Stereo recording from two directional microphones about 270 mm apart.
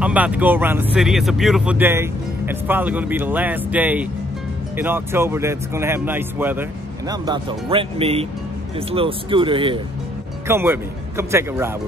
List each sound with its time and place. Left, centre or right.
0.0 s speech: centre